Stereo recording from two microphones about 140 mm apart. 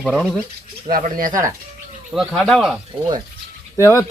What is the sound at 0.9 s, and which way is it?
Speech, 85° right.